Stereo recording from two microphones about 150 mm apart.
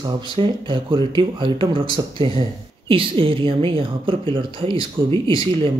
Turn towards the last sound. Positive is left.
turn(degrees=-35)  # may be behind; listen again after turning